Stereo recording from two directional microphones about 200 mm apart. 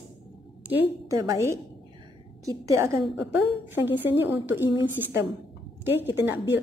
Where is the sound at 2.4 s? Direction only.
15° right (ahead or behind).